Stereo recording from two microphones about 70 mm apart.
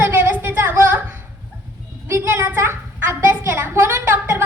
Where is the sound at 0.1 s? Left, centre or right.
Right.